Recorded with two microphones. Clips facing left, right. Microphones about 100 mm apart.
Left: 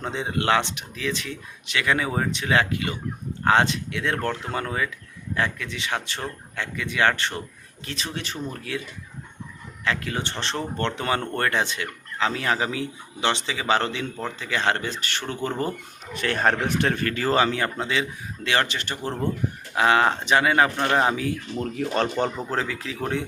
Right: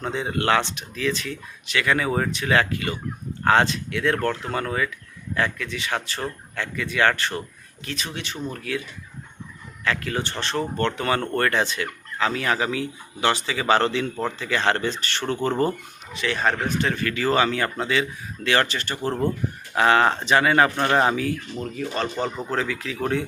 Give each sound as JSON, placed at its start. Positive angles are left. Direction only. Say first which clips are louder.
{"t": 0.0, "sound": "a man's voice", "louder": "right 1 dB", "side_deg": 20}
{"t": 9.8, "sound": "speech", "louder": "right 1 dB", "side_deg": 20}
{"t": 16.1, "sound": "a man's voice", "louder": "left 1 dB", "side_deg": 50}
{"t": 16.6, "sound": "a man's voice", "louder": "left 1 dB", "side_deg": 70}
{"t": 21.8, "sound": "speech", "louder": "left 3 dB", "side_deg": 60}
{"t": 22.4, "sound": "speech", "louder": "right 1 dB", "side_deg": 30}